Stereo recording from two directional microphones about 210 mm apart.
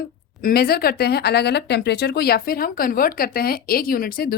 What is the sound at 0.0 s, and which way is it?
A woman's voice, 45° left (ahead or behind).